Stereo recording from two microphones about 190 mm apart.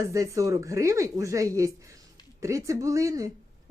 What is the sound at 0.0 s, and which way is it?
Speech, 15° right (ahead or behind).